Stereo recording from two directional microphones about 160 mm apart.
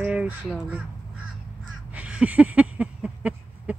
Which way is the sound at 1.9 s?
10° right (ahead or behind).